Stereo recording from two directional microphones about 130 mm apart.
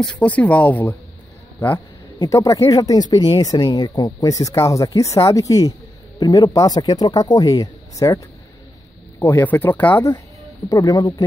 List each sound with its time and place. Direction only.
0.0 s speech: 10° left (ahead or behind)
2.1 s speech: 25° left (ahead or behind)
9.2 s speech: 15° left (ahead or behind)
10.7 s speech: 30° left (ahead or behind)